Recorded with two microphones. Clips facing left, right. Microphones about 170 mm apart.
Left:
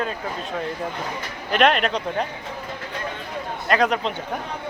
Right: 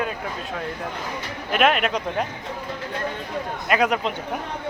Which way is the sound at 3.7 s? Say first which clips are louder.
Left 1 dB; 10° right (ahead or behind).